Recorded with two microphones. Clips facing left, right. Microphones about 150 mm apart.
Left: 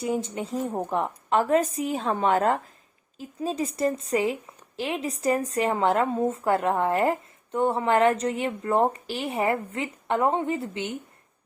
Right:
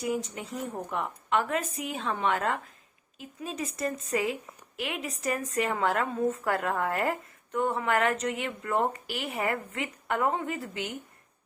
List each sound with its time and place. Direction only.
0.0 s a woman's voice: 30° left (ahead or behind)